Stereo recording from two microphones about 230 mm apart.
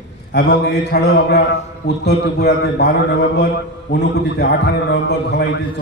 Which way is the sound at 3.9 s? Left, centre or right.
Left.